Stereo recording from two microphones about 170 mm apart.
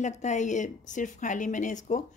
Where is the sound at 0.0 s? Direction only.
45° left (ahead or behind).